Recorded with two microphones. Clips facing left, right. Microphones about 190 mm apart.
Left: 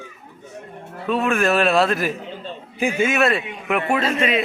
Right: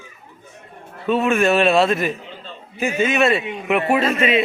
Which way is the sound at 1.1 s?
Centre (ahead or behind).